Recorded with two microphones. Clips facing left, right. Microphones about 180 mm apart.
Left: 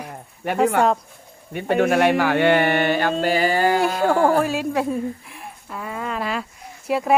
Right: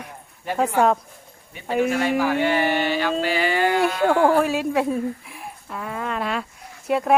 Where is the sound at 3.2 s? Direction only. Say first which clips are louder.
Left 3 dB; 45° left (ahead or behind).